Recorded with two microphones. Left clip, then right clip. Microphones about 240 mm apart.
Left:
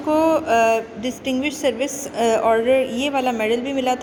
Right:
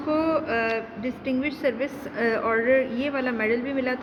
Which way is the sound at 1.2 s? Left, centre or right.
Centre.